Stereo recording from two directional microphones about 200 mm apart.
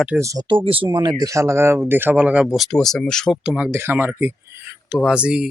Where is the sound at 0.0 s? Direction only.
10° right (ahead or behind).